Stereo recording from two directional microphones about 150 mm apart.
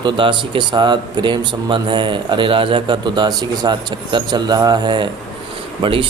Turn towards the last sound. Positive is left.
turn(degrees=-35)  # may be behind; listen again after turning